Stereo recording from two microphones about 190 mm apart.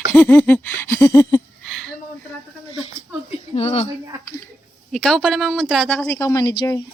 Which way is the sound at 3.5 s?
30° left (ahead or behind).